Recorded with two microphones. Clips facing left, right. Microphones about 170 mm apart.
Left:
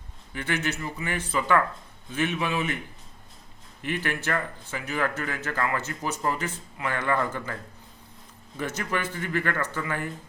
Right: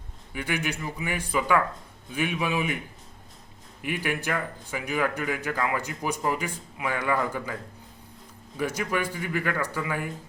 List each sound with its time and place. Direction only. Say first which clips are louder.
0.3 s speech: left 1 dB; 10° right (ahead or behind)
3.8 s speech: even; 10° right (ahead or behind)
8.5 s speech: right 2 dB; 10° right (ahead or behind)